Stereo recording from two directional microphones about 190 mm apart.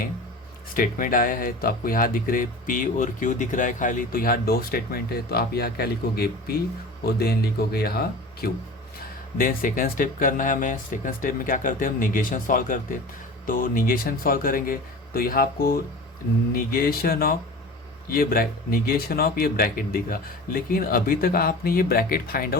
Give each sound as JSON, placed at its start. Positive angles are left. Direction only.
{"t": 0.7, "sound": "speech", "side_deg": 45}